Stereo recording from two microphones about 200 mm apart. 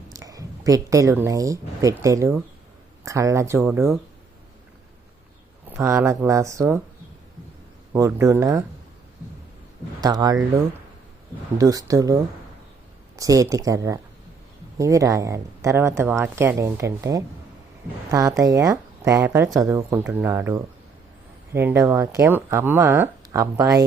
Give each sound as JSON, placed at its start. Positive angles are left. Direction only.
{"t": 0.1, "sound": "a woman's voice", "side_deg": -15}
{"t": 5.6, "sound": "speech", "side_deg": -10}
{"t": 7.9, "sound": "speech", "side_deg": -15}
{"t": 10.0, "sound": "speech", "side_deg": -20}
{"t": 11.5, "sound": "speech", "side_deg": -20}